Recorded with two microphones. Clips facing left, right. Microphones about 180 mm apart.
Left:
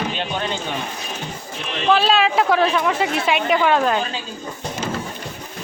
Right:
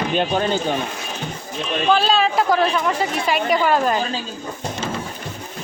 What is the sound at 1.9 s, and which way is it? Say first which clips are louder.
A woman's voice: left 1 dB; centre (ahead or behind).